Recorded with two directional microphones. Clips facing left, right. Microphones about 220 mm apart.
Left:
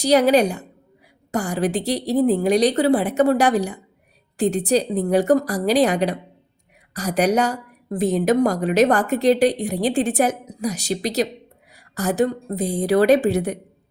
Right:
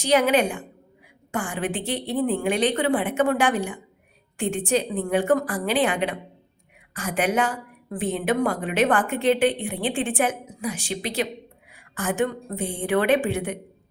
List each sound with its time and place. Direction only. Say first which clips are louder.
0.0 s a woman's voice: left 4 dB; 40° left (ahead or behind)